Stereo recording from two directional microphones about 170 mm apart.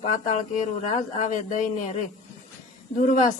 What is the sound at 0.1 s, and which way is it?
Speech, 50° left (ahead or behind).